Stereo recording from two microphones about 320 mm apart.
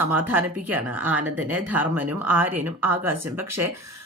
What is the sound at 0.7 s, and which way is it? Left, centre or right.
Speech, centre.